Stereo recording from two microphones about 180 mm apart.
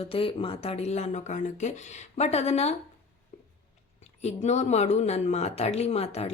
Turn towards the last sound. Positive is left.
turn(degrees=35)  # may be behind; listen again after turning